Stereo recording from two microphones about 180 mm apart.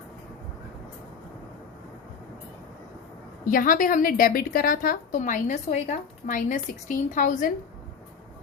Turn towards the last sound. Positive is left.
turn(degrees=45)  # may be behind; listen again after turning